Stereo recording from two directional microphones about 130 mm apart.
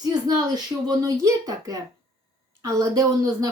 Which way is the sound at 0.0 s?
30° right (ahead or behind).